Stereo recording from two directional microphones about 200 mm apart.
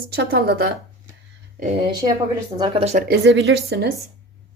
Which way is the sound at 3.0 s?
55° right (ahead or behind).